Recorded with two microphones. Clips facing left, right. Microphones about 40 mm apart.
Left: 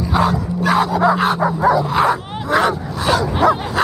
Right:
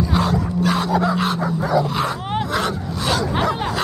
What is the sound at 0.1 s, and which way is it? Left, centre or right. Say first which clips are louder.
Dog: left 3 dB; centre.